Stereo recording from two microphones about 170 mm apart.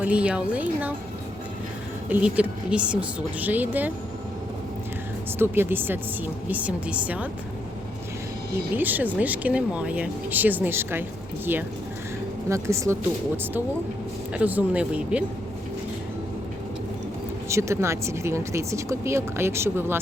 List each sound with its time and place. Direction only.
0.0 s speech: 5° right (ahead or behind)
2.0 s speech: 10° right (ahead or behind)
5.4 s speech: 15° right (ahead or behind)
8.7 s speech: 10° right (ahead or behind)
12.5 s speech: 15° right (ahead or behind)
17.5 s speech: 15° right (ahead or behind)